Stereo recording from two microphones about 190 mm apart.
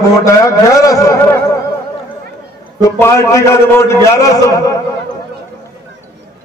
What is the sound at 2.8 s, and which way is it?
A man's voice, 15° left (ahead or behind).